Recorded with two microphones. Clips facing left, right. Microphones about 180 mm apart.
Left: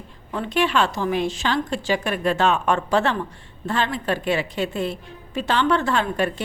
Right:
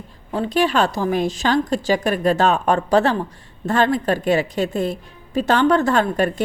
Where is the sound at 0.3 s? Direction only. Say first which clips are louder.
Right 3 dB; 35° right (ahead or behind).